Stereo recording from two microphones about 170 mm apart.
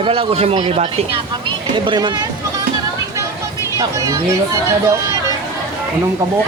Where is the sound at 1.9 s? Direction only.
25° right (ahead or behind).